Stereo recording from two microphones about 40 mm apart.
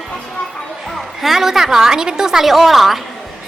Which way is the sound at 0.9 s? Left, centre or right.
Centre.